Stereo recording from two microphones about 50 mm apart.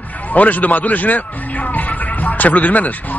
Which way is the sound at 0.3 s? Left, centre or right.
Left.